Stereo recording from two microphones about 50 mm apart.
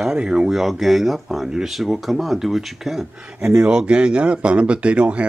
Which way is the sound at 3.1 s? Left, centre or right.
Right.